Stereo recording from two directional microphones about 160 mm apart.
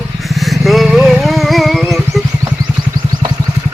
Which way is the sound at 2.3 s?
25° right (ahead or behind).